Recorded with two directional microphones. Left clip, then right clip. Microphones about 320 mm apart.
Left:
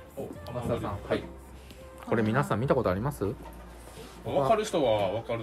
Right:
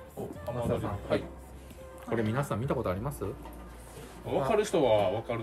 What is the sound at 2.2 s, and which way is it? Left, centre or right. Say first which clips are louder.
Speech: left 5 dB; left.